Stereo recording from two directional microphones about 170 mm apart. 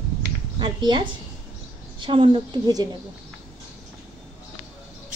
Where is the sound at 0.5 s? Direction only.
25° right (ahead or behind).